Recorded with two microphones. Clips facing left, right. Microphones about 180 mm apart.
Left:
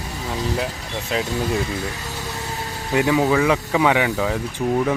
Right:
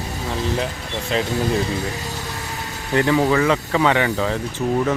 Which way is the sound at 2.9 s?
10° left (ahead or behind).